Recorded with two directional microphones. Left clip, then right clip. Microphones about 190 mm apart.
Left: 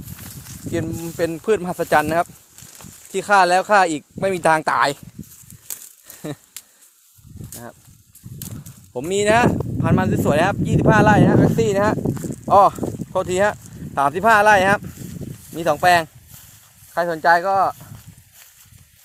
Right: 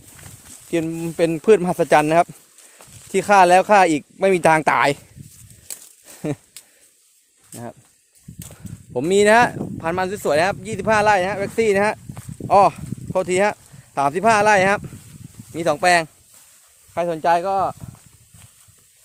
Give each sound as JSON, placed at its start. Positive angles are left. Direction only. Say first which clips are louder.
{"t": 0.7, "sound": "speech", "louder": "right 3 dB", "side_deg": -40}
{"t": 7.5, "sound": "speech", "louder": "right 3 dB", "side_deg": -45}
{"t": 9.0, "sound": "speech", "louder": "right 3 dB", "side_deg": -40}
{"t": 9.7, "sound": "speech", "louder": "left 2 dB", "side_deg": -25}